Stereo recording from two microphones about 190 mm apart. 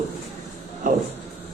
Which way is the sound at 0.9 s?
40° right (ahead or behind).